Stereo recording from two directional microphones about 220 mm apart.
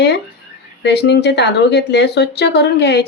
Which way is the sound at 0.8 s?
50° left (ahead or behind).